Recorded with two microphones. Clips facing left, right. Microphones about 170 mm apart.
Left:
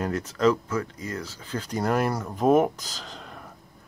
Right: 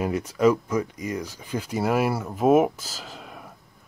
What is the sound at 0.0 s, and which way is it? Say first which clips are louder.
Speech: right 2 dB; 10° right (ahead or behind).